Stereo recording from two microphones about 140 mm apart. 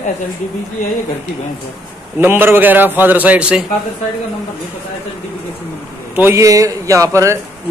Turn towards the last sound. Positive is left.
turn(degrees=-20)  # may be behind; listen again after turning